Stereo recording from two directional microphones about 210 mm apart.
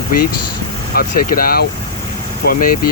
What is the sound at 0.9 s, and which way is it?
Speech, 45° left (ahead or behind).